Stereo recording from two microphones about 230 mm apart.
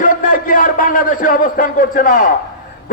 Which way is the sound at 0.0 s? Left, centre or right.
Left.